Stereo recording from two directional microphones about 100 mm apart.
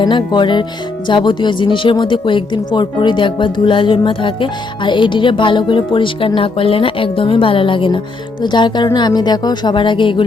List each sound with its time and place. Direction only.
0.0 s speech: 50° left (ahead or behind)